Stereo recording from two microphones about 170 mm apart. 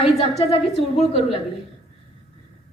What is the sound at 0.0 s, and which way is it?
A woman's voice, 35° left (ahead or behind).